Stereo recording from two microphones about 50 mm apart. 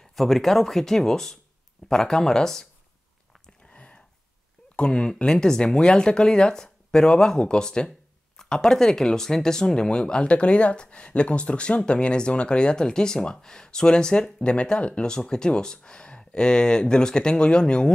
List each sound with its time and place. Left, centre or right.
0.0 s speech: centre
3.7 s a sound: left
4.7 s speech: centre